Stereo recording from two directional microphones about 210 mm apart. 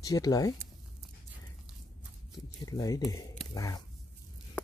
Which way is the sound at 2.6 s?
15° left (ahead or behind).